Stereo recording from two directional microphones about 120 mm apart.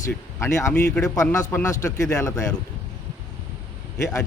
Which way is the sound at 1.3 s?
30° left (ahead or behind).